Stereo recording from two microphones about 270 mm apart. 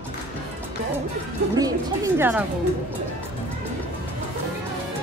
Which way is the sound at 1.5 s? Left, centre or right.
Centre.